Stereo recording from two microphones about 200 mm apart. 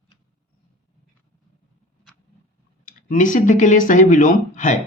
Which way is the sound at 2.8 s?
40° left (ahead or behind).